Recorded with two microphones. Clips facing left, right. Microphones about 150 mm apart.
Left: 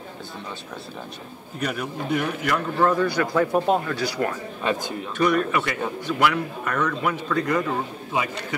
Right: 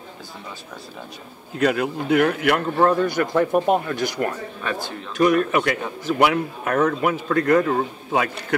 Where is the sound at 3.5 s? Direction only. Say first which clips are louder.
Right 2 dB; 15° right (ahead or behind).